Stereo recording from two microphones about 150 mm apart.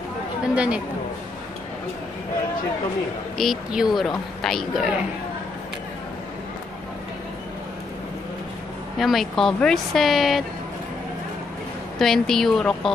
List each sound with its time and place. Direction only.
0.6 s speech: 10° right (ahead or behind)
3.3 s speech: centre (ahead or behind)
8.9 s speech: centre (ahead or behind)
12.0 s speech: centre (ahead or behind)